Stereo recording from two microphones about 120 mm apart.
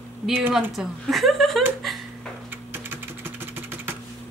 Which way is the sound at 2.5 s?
20° right (ahead or behind).